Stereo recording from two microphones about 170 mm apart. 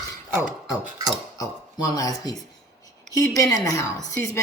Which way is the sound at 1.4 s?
20° left (ahead or behind).